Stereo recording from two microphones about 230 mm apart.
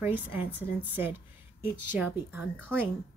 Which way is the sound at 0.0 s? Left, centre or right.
Centre.